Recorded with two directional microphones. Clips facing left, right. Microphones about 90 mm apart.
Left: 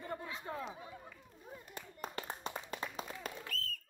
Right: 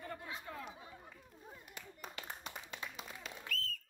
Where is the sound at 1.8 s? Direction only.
40° left (ahead or behind).